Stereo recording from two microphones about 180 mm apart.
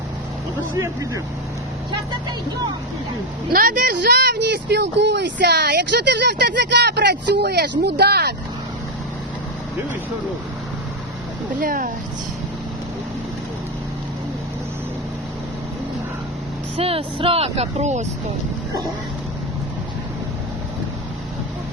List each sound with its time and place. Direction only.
0.7 s speech: 15° right (ahead or behind)
3.5 s speech: 55° right (ahead or behind)
11.6 s speech: 50° right (ahead or behind)
16.7 s speech: 30° right (ahead or behind)